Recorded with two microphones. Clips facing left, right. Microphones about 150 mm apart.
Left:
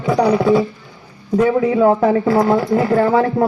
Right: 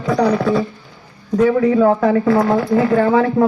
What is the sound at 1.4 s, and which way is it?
Speech, 20° left (ahead or behind).